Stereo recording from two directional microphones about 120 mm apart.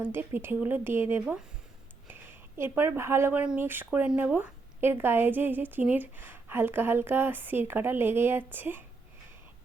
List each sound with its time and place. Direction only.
0.0 s speech: 15° right (ahead or behind)
1.2 s a woman's voice: 10° right (ahead or behind)
2.6 s a woman's voice: 20° right (ahead or behind)